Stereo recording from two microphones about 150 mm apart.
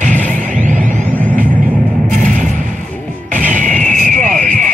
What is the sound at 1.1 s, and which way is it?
Music, 10° left (ahead or behind).